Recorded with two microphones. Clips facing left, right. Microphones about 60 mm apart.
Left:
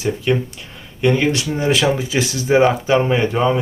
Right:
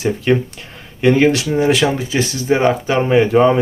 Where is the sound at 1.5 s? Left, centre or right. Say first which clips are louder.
Right 2 dB; centre.